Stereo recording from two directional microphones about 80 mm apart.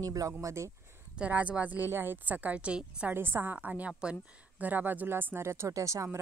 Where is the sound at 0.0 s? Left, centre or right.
Right.